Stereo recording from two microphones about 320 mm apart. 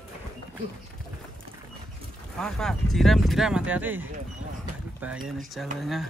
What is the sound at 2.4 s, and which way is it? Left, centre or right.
Speech, centre.